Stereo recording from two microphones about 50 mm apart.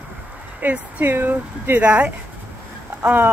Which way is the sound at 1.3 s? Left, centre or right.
Right.